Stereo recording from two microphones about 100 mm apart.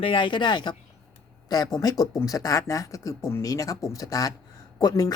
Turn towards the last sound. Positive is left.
turn(degrees=40)  # may be behind; listen again after turning